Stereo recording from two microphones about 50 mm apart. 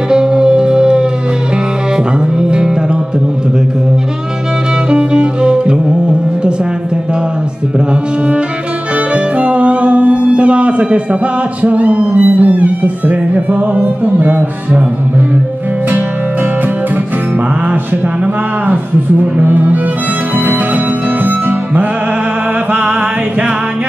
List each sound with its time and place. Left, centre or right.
0.1 s music: centre
2.3 s music: centre
4.8 s music: centre
9.1 s music: right
11.6 s speech: right
19.4 s music: right
22.7 s mantra: right